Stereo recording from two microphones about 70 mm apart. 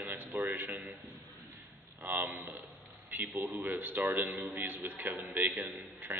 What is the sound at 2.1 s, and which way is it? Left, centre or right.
A man's voice, right.